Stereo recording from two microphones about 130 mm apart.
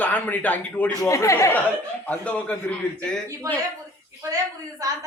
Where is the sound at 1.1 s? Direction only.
25° left (ahead or behind).